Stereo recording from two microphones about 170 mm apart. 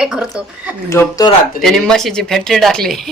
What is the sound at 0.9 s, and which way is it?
Speech, 20° left (ahead or behind).